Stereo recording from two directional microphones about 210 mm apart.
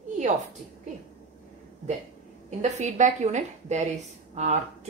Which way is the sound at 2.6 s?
35° right (ahead or behind).